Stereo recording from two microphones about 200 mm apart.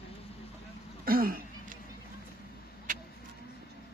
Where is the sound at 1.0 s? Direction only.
45° right (ahead or behind).